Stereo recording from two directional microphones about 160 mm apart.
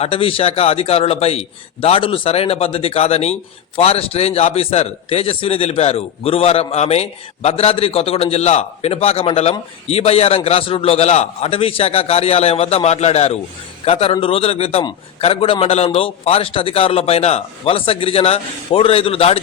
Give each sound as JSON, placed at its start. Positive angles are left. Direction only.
{"t": 0.0, "sound": "a man's voice", "side_deg": 35}